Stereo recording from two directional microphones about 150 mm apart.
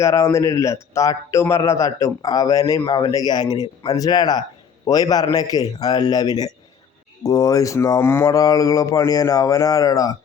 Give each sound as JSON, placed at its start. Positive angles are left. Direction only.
{"t": 0.0, "sound": "a man's voice", "side_deg": 20}